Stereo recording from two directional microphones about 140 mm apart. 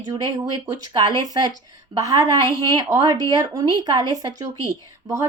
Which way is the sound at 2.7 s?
25° right (ahead or behind).